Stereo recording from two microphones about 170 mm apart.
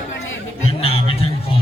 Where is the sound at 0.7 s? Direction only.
35° left (ahead or behind).